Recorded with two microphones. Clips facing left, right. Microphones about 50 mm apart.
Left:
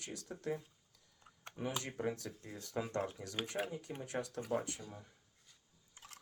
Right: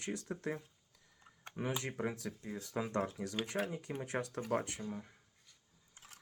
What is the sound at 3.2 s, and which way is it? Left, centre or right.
Speech, right.